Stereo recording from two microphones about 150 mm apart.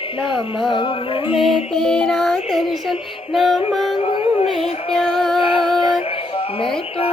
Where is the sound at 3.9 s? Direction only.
40° left (ahead or behind).